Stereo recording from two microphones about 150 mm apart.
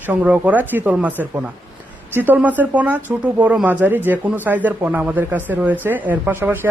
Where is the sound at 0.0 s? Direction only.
10° right (ahead or behind).